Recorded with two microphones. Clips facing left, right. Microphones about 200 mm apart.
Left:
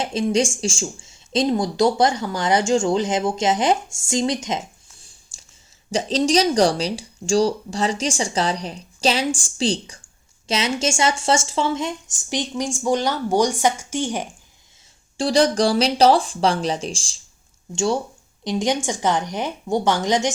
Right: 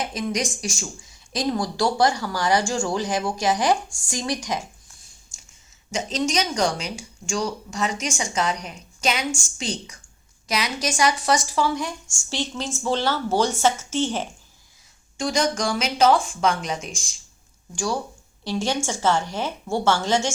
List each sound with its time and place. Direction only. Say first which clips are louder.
0.0 s speech: left 6 dB; 25° left (ahead or behind)
5.9 s speech: left 6 dB; 35° left (ahead or behind); by 14.3 s 15° left (ahead or behind)
15.2 s speech: left 6 dB; 35° left (ahead or behind)
18.4 s speech: left 3 dB; 15° left (ahead or behind)